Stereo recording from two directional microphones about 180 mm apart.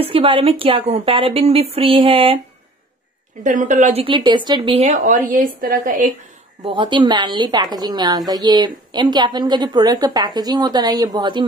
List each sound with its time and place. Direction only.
0.0 s a woman's voice: 30° right (ahead or behind)
3.4 s a woman's voice: 45° right (ahead or behind)
6.6 s a woman's voice: 25° right (ahead or behind)